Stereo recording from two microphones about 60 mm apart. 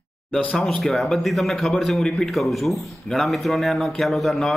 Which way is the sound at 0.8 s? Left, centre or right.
Centre.